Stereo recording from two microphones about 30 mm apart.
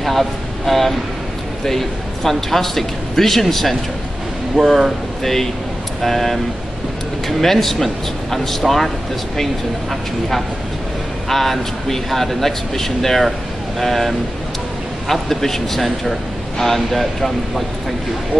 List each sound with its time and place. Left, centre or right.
0.0 s a man's voice: centre
4.6 s speech: right
5.2 s a man's voice: centre
11.2 s a man's voice: centre